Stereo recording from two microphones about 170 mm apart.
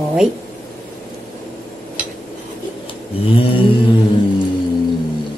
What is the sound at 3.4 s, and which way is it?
Mantra, 30° left (ahead or behind).